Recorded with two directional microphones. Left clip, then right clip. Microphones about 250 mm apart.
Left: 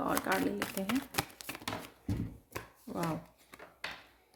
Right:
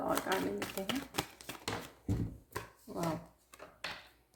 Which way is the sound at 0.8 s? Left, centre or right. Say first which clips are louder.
Left 3 dB; left.